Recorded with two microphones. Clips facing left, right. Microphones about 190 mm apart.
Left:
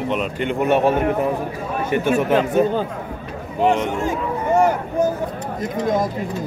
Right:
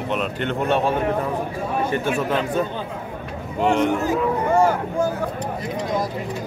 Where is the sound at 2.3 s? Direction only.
40° left (ahead or behind).